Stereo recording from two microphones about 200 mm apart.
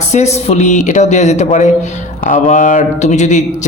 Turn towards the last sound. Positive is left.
turn(degrees=35)  # may be behind; listen again after turning